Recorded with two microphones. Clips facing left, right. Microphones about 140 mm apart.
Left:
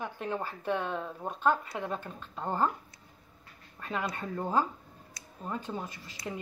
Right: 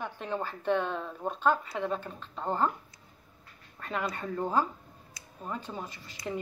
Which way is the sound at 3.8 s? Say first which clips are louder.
Right 1 dB; 10° left (ahead or behind).